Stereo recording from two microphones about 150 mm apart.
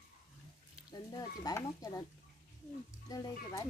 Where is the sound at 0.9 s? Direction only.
25° left (ahead or behind).